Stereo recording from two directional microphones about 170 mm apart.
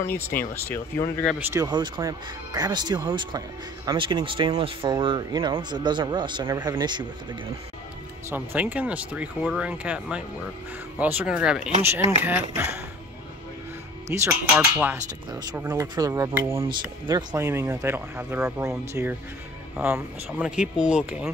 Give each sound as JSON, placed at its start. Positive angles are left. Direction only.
{"t": 0.0, "sound": "speech", "side_deg": 15}
{"t": 1.5, "sound": "speech", "side_deg": -25}
{"t": 8.3, "sound": "speech", "side_deg": -10}
{"t": 14.1, "sound": "speech", "side_deg": -10}
{"t": 19.8, "sound": "speech", "side_deg": -10}